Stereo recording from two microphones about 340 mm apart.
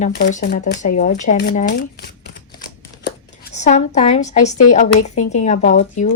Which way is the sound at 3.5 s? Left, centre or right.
Centre.